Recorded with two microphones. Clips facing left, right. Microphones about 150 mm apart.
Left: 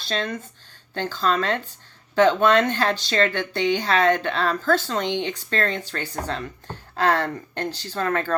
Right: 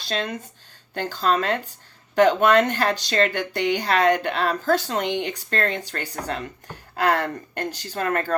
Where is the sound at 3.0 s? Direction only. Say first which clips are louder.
Even; 15° right (ahead or behind).